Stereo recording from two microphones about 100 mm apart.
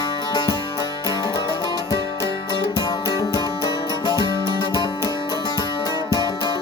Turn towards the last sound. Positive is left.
turn(degrees=45)  # may be behind; listen again after turning